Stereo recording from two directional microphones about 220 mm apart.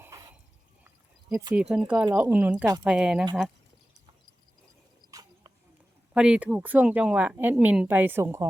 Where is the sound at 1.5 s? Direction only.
Centre (ahead or behind).